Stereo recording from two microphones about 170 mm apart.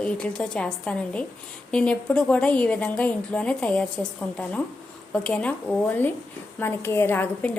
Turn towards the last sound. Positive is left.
turn(degrees=10)  # may be behind; listen again after turning